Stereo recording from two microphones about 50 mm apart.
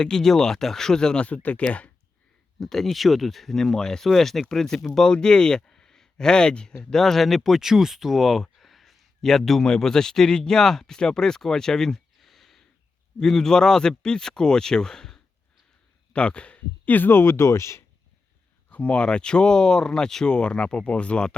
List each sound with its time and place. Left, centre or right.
0.0 s speech: centre
1.2 s speech: left
2.6 s speech: centre
7.0 s speech: centre
16.1 s speech: left
17.1 s speech: left
18.7 s speech: left